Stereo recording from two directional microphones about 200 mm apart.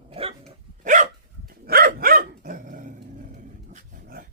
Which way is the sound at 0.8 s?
40° right (ahead or behind).